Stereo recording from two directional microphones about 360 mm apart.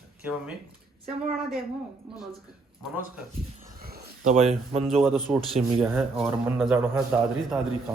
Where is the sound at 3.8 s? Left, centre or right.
Right.